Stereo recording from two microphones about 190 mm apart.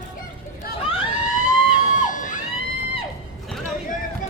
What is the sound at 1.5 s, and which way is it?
Music, 45° left (ahead or behind).